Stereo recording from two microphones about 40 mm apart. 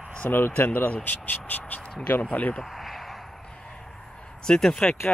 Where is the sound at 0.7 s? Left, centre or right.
Left.